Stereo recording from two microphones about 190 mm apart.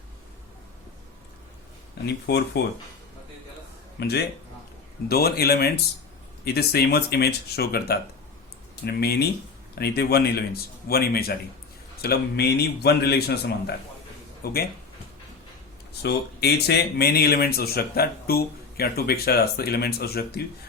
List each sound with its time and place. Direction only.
2.0 s speech: 60° left (ahead or behind)
4.0 s a man's voice: 60° left (ahead or behind)
15.9 s speech: 60° left (ahead or behind)